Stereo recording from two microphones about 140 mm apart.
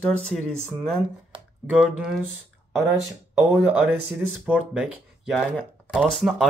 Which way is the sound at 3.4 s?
10° right (ahead or behind).